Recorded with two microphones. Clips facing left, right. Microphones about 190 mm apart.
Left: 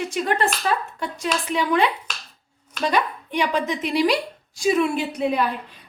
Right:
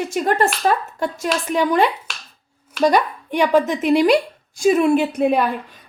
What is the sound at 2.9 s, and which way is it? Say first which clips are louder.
A woman's voice: right 4 dB; 45° right (ahead or behind).